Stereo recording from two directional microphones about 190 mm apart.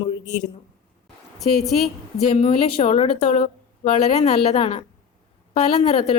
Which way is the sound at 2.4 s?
30° left (ahead or behind).